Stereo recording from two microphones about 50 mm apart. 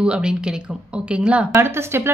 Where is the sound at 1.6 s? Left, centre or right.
Right.